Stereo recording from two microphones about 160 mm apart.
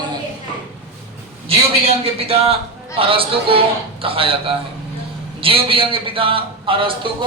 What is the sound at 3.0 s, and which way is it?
A man's voice, 35° right (ahead or behind).